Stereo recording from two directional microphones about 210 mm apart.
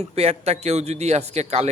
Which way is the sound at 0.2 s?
30° right (ahead or behind).